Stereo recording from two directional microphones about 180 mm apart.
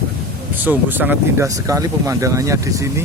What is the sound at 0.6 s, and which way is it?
Speech, 10° right (ahead or behind).